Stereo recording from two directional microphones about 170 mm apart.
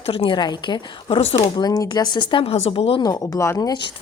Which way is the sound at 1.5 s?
25° left (ahead or behind).